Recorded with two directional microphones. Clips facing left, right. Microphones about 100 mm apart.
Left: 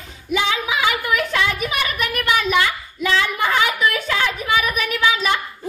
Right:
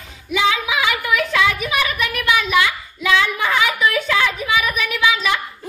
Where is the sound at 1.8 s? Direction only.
40° left (ahead or behind).